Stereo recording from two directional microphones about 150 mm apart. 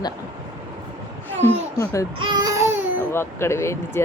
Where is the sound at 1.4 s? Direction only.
20° left (ahead or behind).